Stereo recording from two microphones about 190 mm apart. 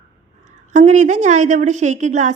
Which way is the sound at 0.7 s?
40° right (ahead or behind).